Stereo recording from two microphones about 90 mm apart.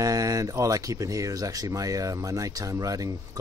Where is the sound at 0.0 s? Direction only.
40° right (ahead or behind).